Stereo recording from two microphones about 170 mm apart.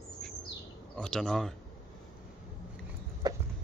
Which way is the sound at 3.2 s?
25° right (ahead or behind).